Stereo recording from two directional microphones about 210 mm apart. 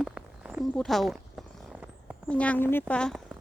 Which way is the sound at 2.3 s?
5° left (ahead or behind).